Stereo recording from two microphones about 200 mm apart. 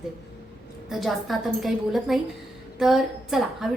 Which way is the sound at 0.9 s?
Centre (ahead or behind).